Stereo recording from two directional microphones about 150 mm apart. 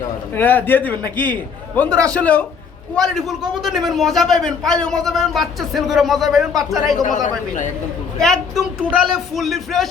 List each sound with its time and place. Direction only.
0.3 s a man's voice: 15° left (ahead or behind)
7.0 s speech: 60° left (ahead or behind)
8.2 s a man's voice: 5° left (ahead or behind)